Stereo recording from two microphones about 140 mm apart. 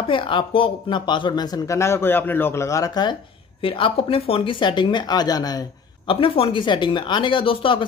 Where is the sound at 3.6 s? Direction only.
40° left (ahead or behind).